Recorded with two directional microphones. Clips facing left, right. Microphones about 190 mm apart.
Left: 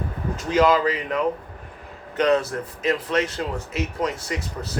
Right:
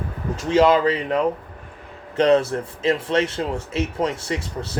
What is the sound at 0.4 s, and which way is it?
Speech, 30° right (ahead or behind).